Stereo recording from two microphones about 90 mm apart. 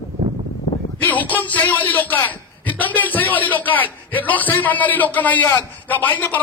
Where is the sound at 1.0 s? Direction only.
20° left (ahead or behind).